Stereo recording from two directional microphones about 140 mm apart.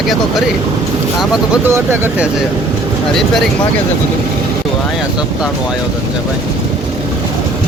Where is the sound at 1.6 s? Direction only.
15° right (ahead or behind).